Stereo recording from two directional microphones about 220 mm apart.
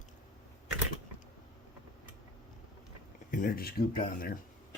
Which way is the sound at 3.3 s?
40° left (ahead or behind).